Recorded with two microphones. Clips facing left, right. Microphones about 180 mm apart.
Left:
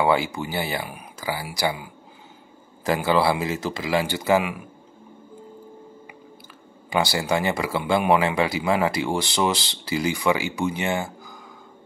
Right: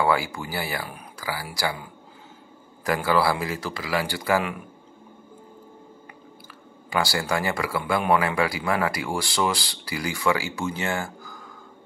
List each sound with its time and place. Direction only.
0.0 s speech: 20° left (ahead or behind)
6.9 s speech: 20° left (ahead or behind)